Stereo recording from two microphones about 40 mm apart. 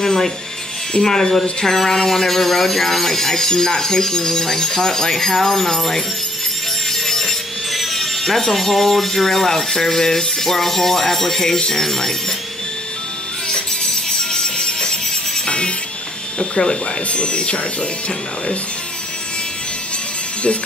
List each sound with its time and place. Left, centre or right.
0.0 s rub: centre
0.9 s speech: centre
6.9 s wood: centre
11.7 s speech: centre
14.3 s music: centre
16.3 s speech: left